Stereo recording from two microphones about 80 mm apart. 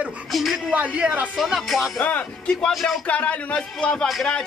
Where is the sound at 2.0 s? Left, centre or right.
Centre.